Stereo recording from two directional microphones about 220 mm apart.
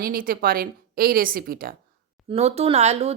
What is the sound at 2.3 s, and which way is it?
Speech, 30° right (ahead or behind).